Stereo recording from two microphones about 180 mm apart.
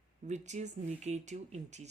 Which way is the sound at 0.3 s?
40° right (ahead or behind).